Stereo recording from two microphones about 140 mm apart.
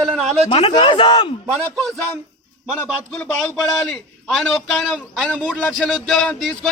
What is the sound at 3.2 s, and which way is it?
A man's voice, 5° left (ahead or behind).